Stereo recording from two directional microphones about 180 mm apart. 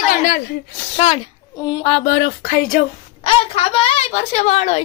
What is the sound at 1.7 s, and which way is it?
Speech, 30° left (ahead or behind).